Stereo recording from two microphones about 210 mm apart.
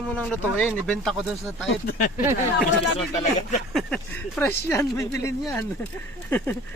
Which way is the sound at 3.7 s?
5° left (ahead or behind).